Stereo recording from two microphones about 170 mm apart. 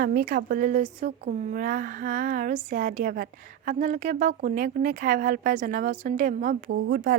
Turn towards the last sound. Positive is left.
turn(degrees=-65)  # may be behind; listen again after turning